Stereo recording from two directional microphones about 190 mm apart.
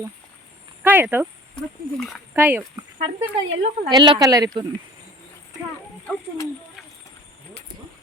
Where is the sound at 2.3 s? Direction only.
10° right (ahead or behind).